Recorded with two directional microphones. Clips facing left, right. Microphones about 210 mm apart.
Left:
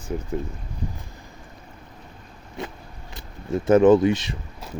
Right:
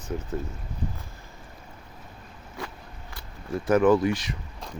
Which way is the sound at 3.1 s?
25° left (ahead or behind).